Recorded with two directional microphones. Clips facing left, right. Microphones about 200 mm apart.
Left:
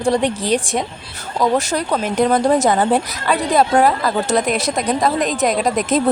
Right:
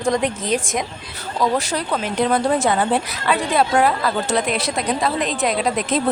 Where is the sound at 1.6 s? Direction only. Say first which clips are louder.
Left 3 dB; 45° left (ahead or behind).